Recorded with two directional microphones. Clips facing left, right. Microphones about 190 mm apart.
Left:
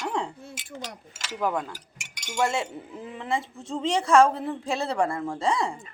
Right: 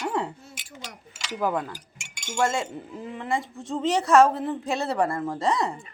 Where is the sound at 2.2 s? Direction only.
15° left (ahead or behind).